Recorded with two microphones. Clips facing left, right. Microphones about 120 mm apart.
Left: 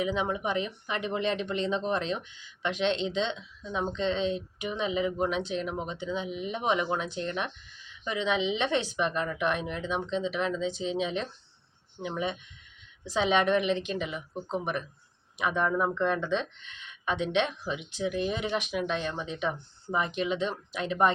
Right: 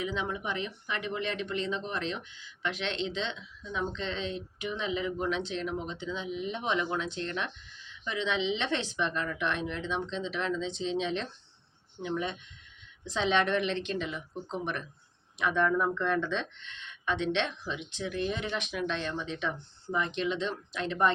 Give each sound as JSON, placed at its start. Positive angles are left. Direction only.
{"t": 0.0, "sound": "speech", "side_deg": 15}